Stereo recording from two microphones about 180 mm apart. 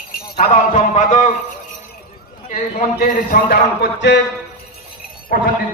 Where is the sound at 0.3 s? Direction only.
40° left (ahead or behind).